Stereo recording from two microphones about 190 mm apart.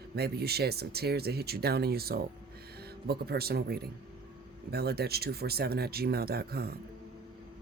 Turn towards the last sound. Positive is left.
turn(degrees=-55)  # may be behind; listen again after turning